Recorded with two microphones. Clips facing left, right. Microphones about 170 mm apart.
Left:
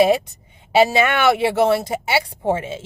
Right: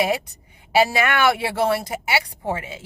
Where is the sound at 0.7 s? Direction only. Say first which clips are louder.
Left 3 dB; 25° left (ahead or behind).